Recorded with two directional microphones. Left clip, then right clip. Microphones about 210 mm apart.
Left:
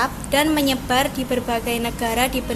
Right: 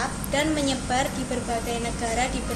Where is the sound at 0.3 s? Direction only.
45° left (ahead or behind).